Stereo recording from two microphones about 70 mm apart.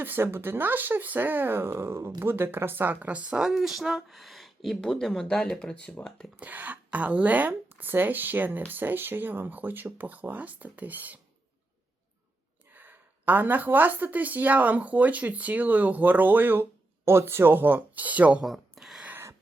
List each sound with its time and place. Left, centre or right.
0.0 s speech: right; by 6.1 s centre
6.4 s speech: right
12.7 s speech: right
18.4 s a sound: centre